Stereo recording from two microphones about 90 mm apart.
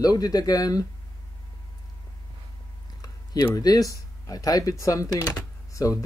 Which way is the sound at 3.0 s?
45° left (ahead or behind).